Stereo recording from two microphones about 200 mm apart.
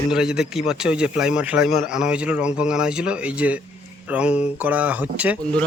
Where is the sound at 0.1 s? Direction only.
5° right (ahead or behind).